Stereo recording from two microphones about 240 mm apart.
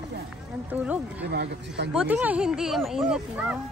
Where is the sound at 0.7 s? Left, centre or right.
Centre.